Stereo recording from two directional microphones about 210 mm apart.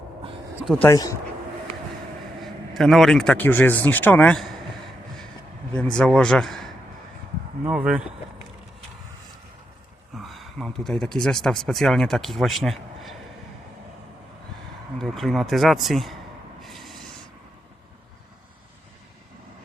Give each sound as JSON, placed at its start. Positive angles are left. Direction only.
{"t": 0.6, "sound": "speech", "side_deg": 0}
{"t": 0.9, "sound": "speech", "side_deg": 15}
{"t": 2.4, "sound": "a man's voice", "side_deg": 0}
{"t": 5.7, "sound": "speech", "side_deg": 5}
{"t": 10.2, "sound": "speech", "side_deg": 0}
{"t": 14.9, "sound": "speech", "side_deg": 0}
{"t": 16.6, "sound": "rub", "side_deg": 0}